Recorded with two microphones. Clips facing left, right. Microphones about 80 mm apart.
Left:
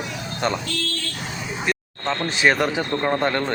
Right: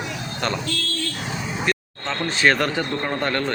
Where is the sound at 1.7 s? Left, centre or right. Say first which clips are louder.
Left 4 dB; centre.